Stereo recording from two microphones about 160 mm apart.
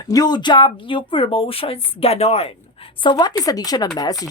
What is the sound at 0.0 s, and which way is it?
Speech, 25° left (ahead or behind).